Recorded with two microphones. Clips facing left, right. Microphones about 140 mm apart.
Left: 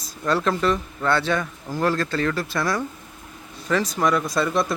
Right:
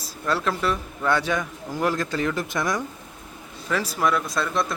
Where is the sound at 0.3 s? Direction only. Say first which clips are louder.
Left 3 dB; 5° right (ahead or behind).